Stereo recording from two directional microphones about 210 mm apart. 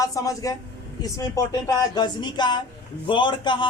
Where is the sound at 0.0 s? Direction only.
15° left (ahead or behind).